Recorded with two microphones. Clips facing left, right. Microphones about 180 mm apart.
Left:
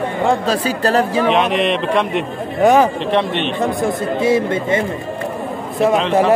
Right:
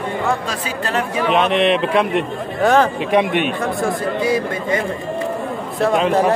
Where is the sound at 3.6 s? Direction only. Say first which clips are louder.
Left 2 dB; 20° left (ahead or behind).